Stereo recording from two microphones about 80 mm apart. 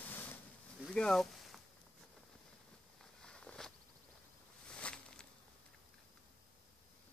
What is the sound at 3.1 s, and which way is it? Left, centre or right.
Walk, centre.